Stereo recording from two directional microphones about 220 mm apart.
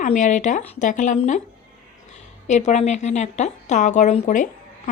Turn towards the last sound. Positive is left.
turn(degrees=35)  # may be behind; listen again after turning